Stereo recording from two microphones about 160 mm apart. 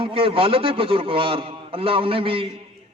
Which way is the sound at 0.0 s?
35° right (ahead or behind).